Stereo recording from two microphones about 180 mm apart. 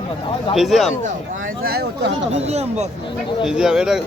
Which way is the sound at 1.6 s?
60° right (ahead or behind).